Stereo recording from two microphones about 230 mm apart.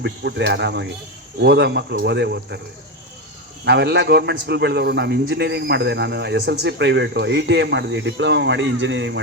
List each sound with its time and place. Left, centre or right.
0.0 s a man's voice: right
3.6 s a man's voice: right